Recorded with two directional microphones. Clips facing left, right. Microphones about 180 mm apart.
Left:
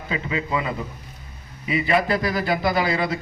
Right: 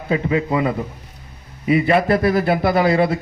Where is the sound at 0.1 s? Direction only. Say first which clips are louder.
Right 7 dB; 50° right (ahead or behind).